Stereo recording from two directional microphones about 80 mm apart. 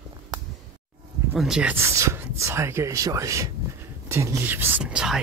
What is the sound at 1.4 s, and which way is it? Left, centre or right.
Speech, centre.